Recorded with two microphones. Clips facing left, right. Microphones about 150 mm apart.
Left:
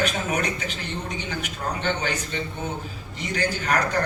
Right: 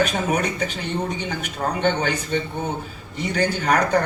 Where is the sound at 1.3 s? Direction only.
55° right (ahead or behind).